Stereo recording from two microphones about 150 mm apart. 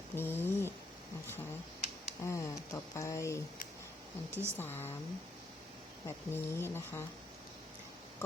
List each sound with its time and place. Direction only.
0.2 s a sound: 15° left (ahead or behind)
2.2 s speech: 20° left (ahead or behind)
4.3 s speech: 15° right (ahead or behind)
4.5 s speech: 15° left (ahead or behind)
6.1 s speech: 15° left (ahead or behind)